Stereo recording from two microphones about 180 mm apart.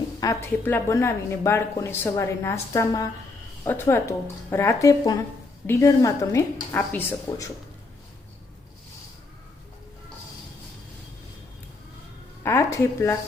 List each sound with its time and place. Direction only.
0.2 s a woman's voice: 15° left (ahead or behind)
12.4 s a woman's voice: 15° left (ahead or behind)